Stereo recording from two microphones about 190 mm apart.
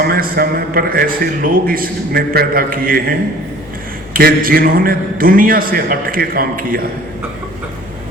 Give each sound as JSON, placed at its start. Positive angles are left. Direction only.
{"t": 0.0, "sound": "a man's voice", "side_deg": -55}